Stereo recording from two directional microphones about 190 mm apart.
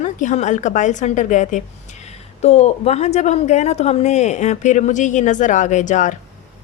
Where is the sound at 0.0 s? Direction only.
40° left (ahead or behind).